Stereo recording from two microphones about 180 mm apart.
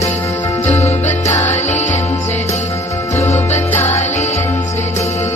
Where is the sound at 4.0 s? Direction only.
40° left (ahead or behind).